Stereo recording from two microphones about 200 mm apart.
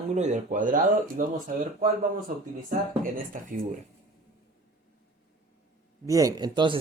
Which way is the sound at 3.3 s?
40° right (ahead or behind).